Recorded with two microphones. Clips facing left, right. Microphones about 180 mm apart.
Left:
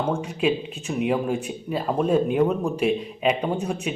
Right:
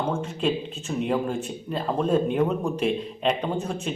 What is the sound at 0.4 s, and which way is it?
A man's voice, 5° left (ahead or behind).